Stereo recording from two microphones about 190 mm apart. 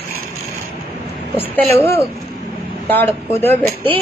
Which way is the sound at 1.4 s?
10° left (ahead or behind).